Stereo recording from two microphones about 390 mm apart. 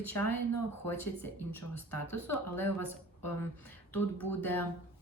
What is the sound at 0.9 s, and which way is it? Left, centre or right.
Speech, centre.